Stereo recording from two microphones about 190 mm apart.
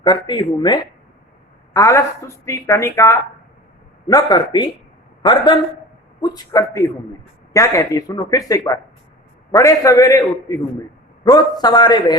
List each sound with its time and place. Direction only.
0.0 s a man's voice: 25° left (ahead or behind)